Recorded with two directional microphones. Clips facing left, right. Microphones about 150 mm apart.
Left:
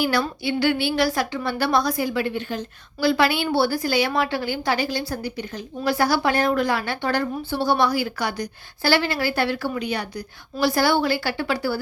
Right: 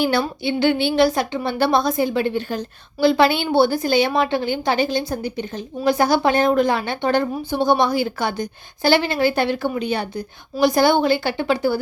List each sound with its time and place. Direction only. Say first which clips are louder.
0.0 s a woman's voice: right 3 dB; 25° right (ahead or behind)